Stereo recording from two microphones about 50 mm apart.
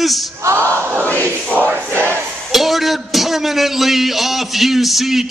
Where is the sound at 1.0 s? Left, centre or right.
Left.